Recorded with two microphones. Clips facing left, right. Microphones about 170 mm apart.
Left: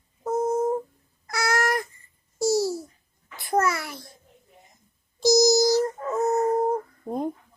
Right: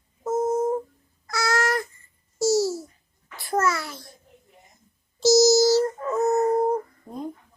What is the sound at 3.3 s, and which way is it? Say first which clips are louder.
Babbling: even; 20° left (ahead or behind).